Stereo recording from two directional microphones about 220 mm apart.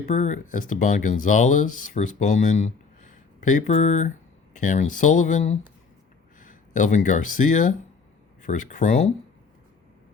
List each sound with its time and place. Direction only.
0.0 s speech: 35° left (ahead or behind)